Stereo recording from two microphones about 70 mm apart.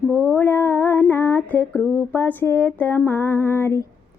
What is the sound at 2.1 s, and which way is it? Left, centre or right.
Female singing, left.